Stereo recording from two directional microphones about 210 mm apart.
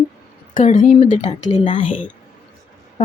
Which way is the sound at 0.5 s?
40° left (ahead or behind).